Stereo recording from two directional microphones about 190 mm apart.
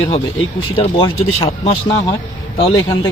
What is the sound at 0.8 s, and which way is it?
Speech, 30° left (ahead or behind).